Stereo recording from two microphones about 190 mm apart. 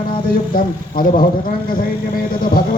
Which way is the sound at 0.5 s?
50° left (ahead or behind).